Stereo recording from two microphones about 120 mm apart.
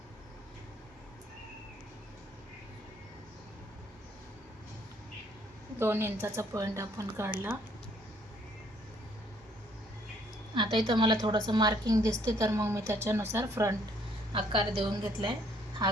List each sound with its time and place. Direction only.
5.8 s a woman's voice: 20° right (ahead or behind)
10.5 s a woman's voice: 40° right (ahead or behind); by 13.7 s 25° right (ahead or behind)
14.3 s a woman's voice: 50° right (ahead or behind)